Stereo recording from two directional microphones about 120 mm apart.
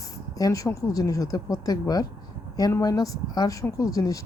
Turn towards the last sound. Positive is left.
turn(degrees=30)  # may be behind; listen again after turning